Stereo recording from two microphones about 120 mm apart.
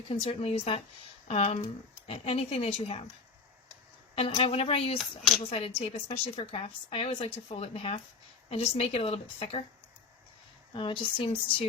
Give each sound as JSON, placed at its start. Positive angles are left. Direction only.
{"t": 0.1, "sound": "a woman's voice", "side_deg": 50}
{"t": 4.1, "sound": "a woman's voice", "side_deg": 55}
{"t": 10.8, "sound": "speech", "side_deg": 45}